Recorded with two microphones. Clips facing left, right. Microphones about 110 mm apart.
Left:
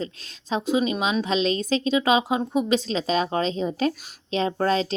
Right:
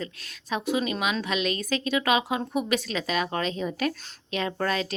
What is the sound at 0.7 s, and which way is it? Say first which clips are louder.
A woman's voice: left 4 dB; 20° left (ahead or behind).